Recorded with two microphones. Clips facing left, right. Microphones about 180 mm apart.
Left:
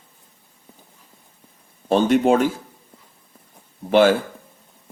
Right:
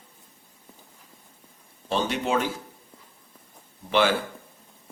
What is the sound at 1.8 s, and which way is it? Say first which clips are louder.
Speech: left 10 dB; 50° left (ahead or behind).